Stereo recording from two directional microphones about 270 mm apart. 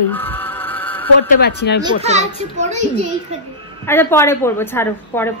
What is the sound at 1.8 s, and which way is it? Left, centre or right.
Speech, right.